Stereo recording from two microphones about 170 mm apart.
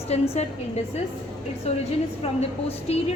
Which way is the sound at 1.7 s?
40° left (ahead or behind).